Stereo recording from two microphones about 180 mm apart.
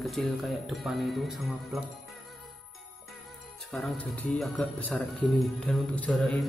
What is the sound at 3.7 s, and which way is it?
Speech, centre (ahead or behind).